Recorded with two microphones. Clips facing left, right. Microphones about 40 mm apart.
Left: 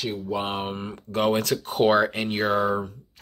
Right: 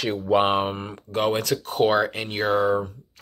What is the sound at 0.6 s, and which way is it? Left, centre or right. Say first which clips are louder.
Speech: right 5 dB; centre.